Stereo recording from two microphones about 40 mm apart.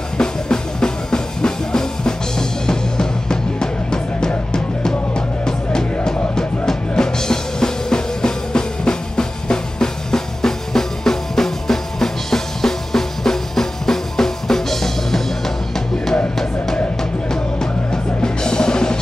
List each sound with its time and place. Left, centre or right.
0.2 s music: centre
17.3 s music: centre